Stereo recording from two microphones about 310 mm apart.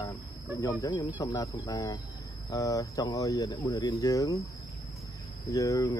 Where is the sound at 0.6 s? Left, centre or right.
Centre.